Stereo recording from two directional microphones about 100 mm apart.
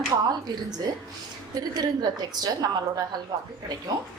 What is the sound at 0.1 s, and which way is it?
Speech, 40° right (ahead or behind).